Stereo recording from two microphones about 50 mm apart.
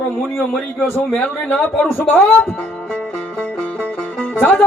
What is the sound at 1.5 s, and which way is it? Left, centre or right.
Speech, left.